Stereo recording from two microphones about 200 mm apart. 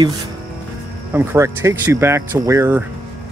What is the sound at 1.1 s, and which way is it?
Speech, 10° right (ahead or behind).